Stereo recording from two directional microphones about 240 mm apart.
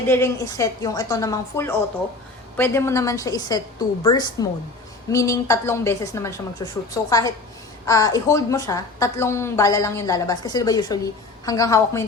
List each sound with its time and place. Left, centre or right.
0.1 s a woman's voice: centre